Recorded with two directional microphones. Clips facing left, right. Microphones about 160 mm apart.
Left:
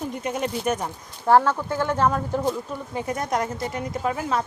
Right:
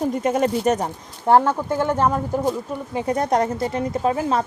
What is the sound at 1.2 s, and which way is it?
Speech, 20° right (ahead or behind).